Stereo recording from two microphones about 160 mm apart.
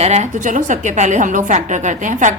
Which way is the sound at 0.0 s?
45° right (ahead or behind).